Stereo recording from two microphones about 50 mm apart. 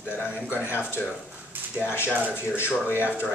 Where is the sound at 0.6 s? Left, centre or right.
Left.